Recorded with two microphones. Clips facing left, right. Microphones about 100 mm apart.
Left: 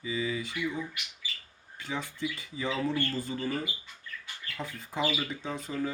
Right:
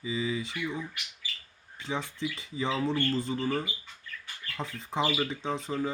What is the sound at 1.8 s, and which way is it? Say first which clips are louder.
Speech: right 1 dB; 20° right (ahead or behind).